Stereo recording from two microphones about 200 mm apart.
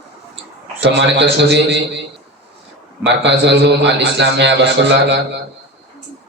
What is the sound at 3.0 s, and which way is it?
A man's voice, 60° right (ahead or behind).